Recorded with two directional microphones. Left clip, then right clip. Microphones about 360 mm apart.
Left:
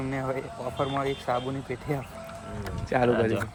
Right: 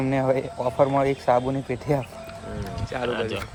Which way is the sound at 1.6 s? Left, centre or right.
Right.